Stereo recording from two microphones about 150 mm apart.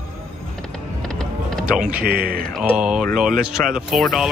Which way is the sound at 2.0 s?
85° right.